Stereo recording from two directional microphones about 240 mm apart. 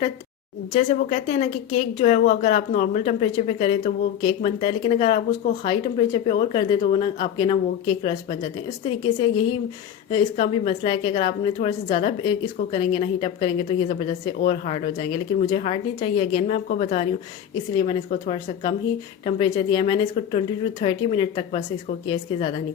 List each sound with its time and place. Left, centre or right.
0.7 s a woman's voice: left
10.1 s a woman's voice: left